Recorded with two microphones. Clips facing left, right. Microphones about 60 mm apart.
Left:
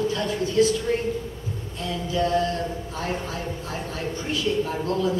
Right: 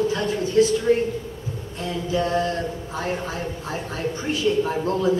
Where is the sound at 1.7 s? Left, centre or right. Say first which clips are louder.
Right 1 dB; right.